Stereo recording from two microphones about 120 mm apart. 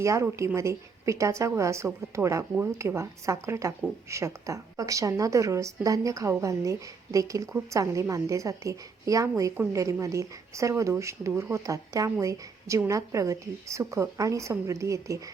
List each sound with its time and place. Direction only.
0.0 s a woman's voice: 25° right (ahead or behind)